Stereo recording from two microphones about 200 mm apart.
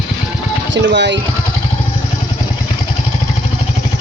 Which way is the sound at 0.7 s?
60° right (ahead or behind).